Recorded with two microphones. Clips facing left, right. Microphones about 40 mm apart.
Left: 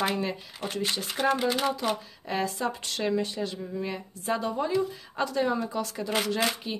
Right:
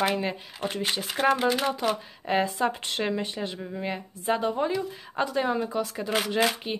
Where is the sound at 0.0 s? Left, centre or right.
Right.